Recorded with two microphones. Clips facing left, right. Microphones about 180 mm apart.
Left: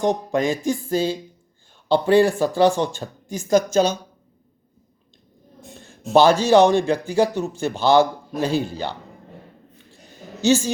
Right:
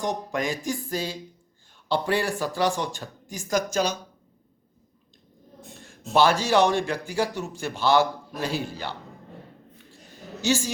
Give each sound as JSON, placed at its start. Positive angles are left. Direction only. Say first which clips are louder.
{"t": 0.0, "sound": "a man's voice", "louder": "left 7 dB", "side_deg": 25}
{"t": 6.1, "sound": "a man's voice", "louder": "left 6 dB", "side_deg": 25}
{"t": 10.4, "sound": "a man's voice", "louder": "left 7 dB", "side_deg": 25}